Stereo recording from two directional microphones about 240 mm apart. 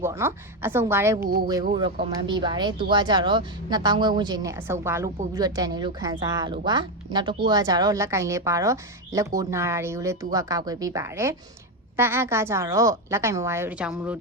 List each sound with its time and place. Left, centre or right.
0.0 s speech: centre